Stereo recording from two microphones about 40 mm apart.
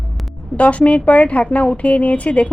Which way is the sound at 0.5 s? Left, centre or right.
Left.